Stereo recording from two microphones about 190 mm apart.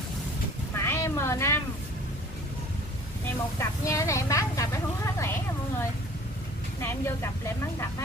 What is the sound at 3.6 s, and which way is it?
A woman's voice, 15° left (ahead or behind).